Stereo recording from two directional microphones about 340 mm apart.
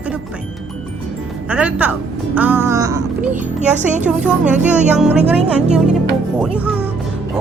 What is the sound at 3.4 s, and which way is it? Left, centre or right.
Speech, right.